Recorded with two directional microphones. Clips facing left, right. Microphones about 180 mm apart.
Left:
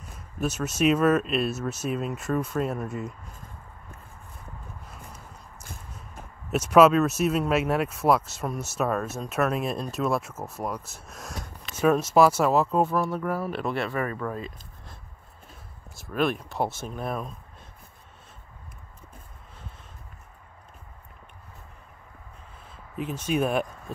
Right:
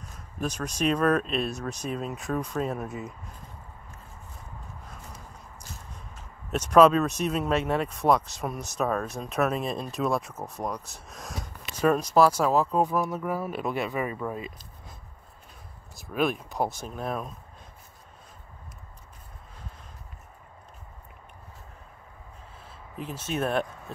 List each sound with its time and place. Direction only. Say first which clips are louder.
0.4 s speech: left 4 dB; 5° left (ahead or behind)
5.6 s a sound: left 2 dB; 55° left (ahead or behind)
6.5 s speech: left 1 dB; 5° left (ahead or behind)
12.9 s speech: left 1 dB; 15° right (ahead or behind)
16.0 s speech: left 1 dB; centre (ahead or behind)
23.2 s speech: left 2 dB; 10° left (ahead or behind)